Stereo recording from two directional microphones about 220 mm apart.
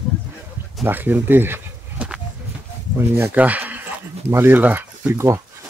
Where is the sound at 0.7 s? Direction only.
10° right (ahead or behind).